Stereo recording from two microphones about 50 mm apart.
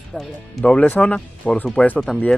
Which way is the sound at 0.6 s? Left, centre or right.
Left.